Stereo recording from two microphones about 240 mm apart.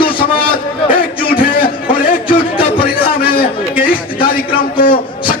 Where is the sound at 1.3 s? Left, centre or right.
Left.